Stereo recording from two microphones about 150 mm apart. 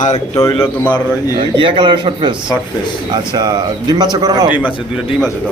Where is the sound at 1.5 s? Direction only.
35° right (ahead or behind).